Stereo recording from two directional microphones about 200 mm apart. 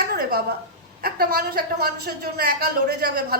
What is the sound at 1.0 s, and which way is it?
A woman's voice, 50° right (ahead or behind).